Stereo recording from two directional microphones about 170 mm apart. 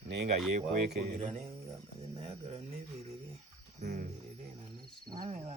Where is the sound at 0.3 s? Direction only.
45° right (ahead or behind).